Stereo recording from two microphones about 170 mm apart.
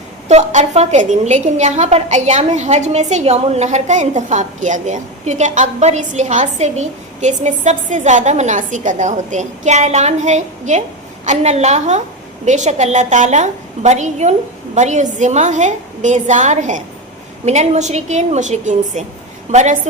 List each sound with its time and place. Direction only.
0.3 s a woman's voice: 40° right (ahead or behind)